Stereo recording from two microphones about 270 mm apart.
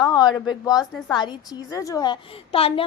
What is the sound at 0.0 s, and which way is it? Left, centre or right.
A woman's voice, centre.